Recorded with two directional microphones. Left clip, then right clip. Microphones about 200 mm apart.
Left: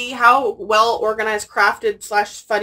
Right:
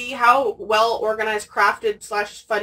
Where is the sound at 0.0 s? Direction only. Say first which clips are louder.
Left 3 dB; 15° left (ahead or behind).